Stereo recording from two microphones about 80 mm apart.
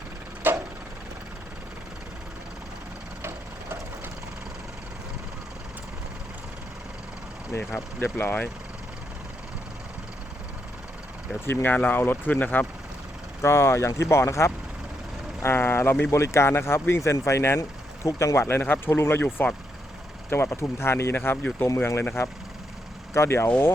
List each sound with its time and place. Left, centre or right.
0.4 s a sound: right
7.7 s speech: left
11.6 s speech: left
13.4 s speech: left
23.1 s speech: left